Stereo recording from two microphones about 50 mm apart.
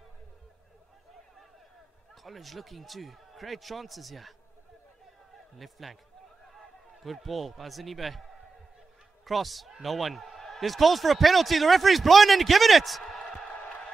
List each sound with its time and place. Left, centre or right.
2.2 s a man's voice: centre
5.6 s a man's voice: centre
13.5 s a sound: left